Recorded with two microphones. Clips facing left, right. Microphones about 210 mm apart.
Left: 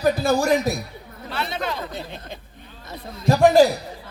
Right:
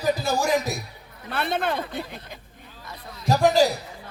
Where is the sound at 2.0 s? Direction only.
25° left (ahead or behind).